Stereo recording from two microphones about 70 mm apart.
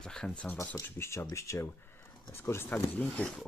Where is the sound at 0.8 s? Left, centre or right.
Left.